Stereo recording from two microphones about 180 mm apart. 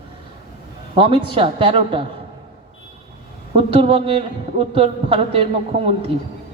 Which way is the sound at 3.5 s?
30° right (ahead or behind).